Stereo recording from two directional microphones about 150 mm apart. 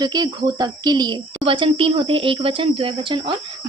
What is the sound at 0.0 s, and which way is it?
Speech, 30° right (ahead or behind).